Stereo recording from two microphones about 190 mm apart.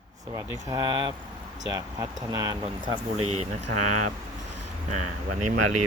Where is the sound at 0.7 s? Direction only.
25° right (ahead or behind).